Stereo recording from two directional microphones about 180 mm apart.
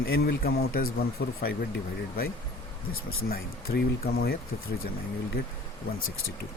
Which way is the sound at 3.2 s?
55° left (ahead or behind).